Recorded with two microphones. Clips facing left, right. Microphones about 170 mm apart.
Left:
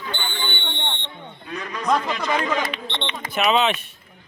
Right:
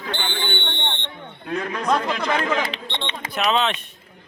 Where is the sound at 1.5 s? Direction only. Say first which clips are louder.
Right 5 dB; 55° right (ahead or behind).